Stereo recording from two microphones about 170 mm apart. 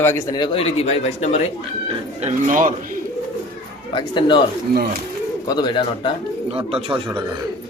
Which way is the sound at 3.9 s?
30° left (ahead or behind).